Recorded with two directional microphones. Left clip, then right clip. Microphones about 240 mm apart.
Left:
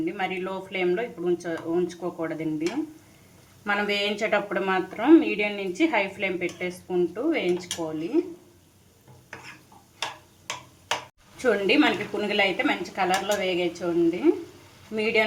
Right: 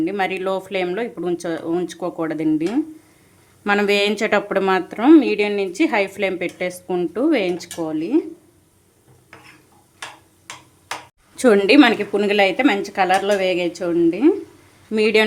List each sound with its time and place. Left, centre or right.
0.0 s speech: right
11.3 s speech: right